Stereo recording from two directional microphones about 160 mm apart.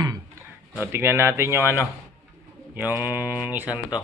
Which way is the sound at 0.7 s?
15° right (ahead or behind).